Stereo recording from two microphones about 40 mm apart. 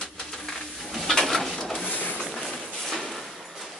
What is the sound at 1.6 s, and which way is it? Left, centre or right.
Printer, centre.